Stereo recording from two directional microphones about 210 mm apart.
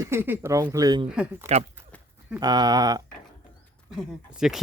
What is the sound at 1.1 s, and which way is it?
Speech, 5° right (ahead or behind).